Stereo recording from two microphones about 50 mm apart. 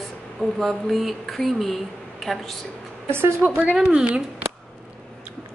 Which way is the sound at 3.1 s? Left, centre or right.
Right.